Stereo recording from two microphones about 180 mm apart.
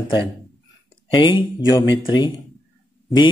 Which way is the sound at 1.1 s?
25° left (ahead or behind).